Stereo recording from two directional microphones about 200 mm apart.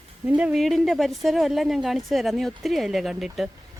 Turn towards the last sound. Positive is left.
turn(degrees=0)  # may be behind; listen again after turning